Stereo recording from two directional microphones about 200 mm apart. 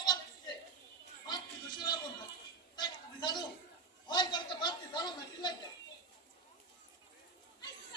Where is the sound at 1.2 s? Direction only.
20° left (ahead or behind).